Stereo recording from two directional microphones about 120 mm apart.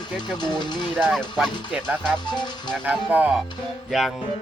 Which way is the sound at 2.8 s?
15° right (ahead or behind).